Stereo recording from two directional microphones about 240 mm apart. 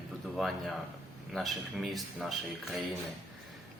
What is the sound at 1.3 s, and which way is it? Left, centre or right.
Speech, centre.